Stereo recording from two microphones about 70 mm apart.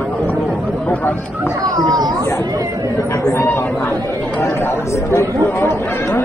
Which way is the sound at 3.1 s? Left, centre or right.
Left.